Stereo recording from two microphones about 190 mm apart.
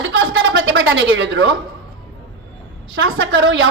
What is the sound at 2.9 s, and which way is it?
Speech, 90° right.